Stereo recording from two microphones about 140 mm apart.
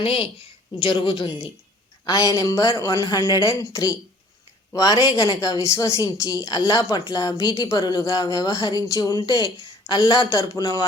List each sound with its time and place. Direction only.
0.0 s a woman's voice: 40° left (ahead or behind); by 10.8 s 25° left (ahead or behind)